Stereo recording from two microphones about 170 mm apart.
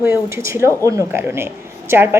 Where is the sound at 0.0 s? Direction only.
15° right (ahead or behind).